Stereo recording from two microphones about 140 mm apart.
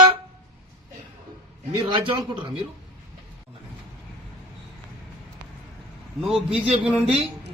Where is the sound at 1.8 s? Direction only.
35° right (ahead or behind).